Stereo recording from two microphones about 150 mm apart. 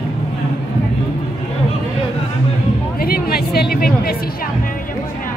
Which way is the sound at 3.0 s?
90° left.